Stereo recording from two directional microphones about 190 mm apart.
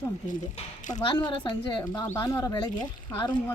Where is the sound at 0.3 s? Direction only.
40° left (ahead or behind).